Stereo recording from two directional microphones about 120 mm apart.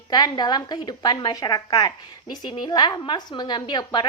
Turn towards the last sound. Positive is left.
turn(degrees=40)  # may be behind; listen again after turning